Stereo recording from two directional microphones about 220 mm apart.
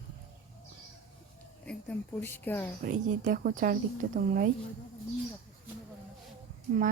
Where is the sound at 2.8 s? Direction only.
40° right (ahead or behind).